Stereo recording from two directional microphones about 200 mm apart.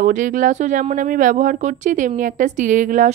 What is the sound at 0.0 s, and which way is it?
A woman's voice, 40° right (ahead or behind).